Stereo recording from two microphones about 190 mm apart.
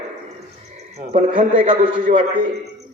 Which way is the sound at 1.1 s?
45° right (ahead or behind).